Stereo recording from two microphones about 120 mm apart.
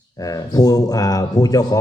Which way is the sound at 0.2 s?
30° left (ahead or behind).